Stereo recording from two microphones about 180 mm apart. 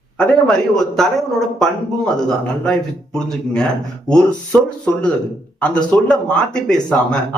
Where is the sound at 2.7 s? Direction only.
5° left (ahead or behind).